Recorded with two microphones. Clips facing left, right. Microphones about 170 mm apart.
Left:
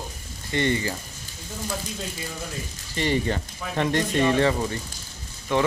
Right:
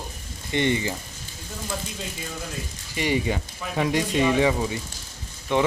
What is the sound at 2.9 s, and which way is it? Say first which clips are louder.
Speech: even; 10° right (ahead or behind).